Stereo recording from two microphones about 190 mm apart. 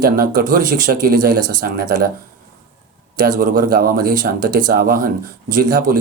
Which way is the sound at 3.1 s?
50° right (ahead or behind).